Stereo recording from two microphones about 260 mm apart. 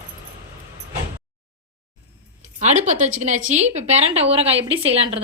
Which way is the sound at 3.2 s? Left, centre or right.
Right.